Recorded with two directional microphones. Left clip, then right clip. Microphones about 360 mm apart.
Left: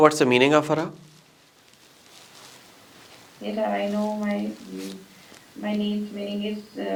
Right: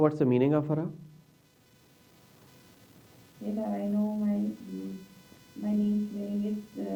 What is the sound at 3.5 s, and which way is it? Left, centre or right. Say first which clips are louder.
Speech: left 9 dB; centre.